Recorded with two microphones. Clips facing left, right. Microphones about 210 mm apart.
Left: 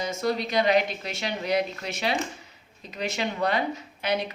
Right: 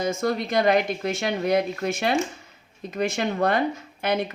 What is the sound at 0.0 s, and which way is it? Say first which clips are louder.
Speech: right 3 dB; 50° right (ahead or behind).